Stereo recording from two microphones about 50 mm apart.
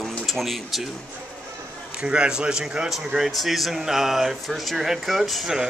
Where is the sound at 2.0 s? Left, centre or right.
Centre.